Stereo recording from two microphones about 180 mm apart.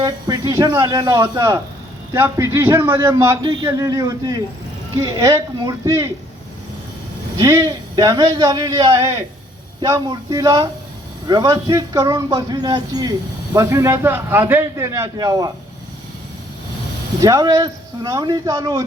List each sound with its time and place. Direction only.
0.0 s a man's voice: 20° right (ahead or behind)
7.3 s a man's voice: 20° right (ahead or behind)
17.2 s a man's voice: 20° right (ahead or behind)